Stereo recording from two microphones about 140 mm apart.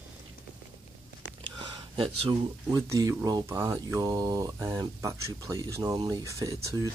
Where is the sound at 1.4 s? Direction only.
35° right (ahead or behind).